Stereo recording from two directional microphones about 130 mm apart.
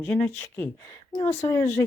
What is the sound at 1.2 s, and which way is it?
Speech, 60° left (ahead or behind).